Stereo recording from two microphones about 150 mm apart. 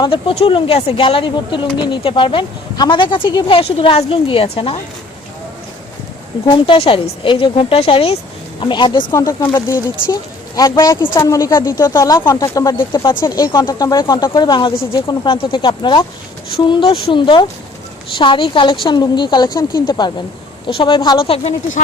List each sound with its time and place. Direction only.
0.0 s speech: 35° left (ahead or behind)
6.5 s speech: 35° left (ahead or behind)